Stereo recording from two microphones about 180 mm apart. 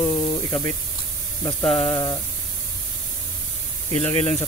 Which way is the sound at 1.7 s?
30° left (ahead or behind).